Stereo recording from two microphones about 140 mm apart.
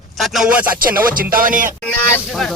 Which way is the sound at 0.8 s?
90° right.